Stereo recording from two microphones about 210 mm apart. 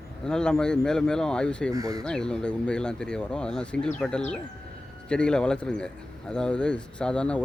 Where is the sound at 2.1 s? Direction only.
5° left (ahead or behind).